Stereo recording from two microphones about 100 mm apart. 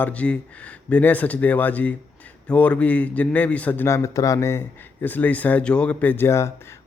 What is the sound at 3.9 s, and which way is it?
Speech, 30° left (ahead or behind).